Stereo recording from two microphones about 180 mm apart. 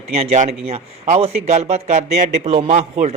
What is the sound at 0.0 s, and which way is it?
Speech, 35° right (ahead or behind).